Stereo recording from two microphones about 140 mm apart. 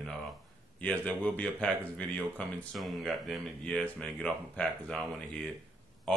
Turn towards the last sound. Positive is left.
turn(degrees=5)  # may be behind; listen again after turning